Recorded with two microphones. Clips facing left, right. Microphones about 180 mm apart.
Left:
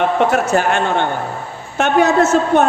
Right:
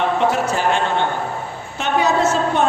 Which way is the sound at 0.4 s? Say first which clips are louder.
Left 3 dB; 50° left (ahead or behind).